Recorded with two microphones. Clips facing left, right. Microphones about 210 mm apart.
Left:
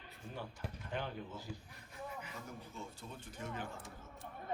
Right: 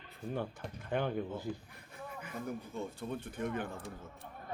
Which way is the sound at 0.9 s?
55° right (ahead or behind).